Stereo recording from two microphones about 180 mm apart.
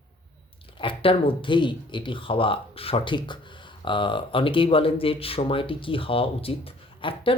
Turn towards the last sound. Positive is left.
turn(degrees=30)  # may be behind; listen again after turning